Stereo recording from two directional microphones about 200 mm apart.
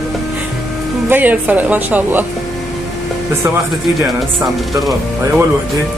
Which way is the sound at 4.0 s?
15° right (ahead or behind).